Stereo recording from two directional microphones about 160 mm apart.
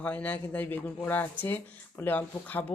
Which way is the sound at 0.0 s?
10° left (ahead or behind).